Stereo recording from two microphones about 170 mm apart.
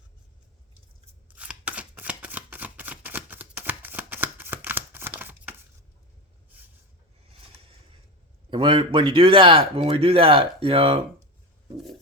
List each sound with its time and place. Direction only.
1.4 s shuffling cards: 10° right (ahead or behind)
8.4 s speech: 30° right (ahead or behind)